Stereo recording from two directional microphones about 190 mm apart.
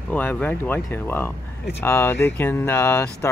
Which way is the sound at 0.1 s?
10° left (ahead or behind).